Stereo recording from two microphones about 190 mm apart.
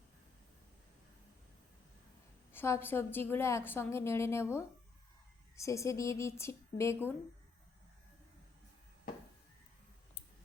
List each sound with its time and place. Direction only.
2.5 s a woman's voice: 10° left (ahead or behind)
5.5 s a woman's voice: 15° left (ahead or behind)